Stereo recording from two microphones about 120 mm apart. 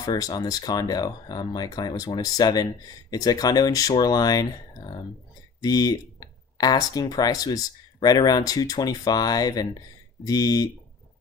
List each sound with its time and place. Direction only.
0.0 s speech: 30° left (ahead or behind)